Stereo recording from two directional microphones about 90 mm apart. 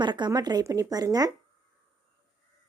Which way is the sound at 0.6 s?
40° right (ahead or behind).